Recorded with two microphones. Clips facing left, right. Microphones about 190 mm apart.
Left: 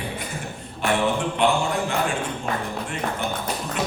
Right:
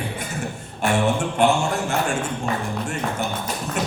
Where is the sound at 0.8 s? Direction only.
45° right (ahead or behind).